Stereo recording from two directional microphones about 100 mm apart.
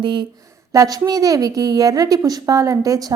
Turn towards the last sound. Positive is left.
turn(degrees=-35)  # may be behind; listen again after turning